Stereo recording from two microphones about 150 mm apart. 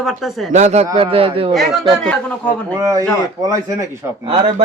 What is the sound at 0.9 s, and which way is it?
Speech, 40° right (ahead or behind).